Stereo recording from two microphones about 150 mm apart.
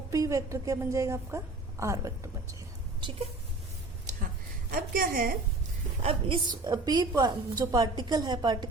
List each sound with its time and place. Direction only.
0.1 s a woman's voice: 20° right (ahead or behind)
4.7 s a woman's voice: 70° right (ahead or behind)
6.0 s a woman's voice: 40° right (ahead or behind)